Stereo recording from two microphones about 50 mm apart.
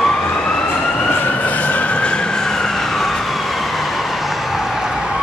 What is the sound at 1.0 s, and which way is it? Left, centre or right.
Emergency vehicle, left.